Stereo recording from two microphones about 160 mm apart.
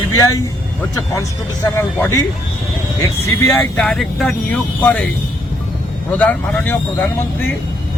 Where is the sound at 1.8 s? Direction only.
15° left (ahead or behind).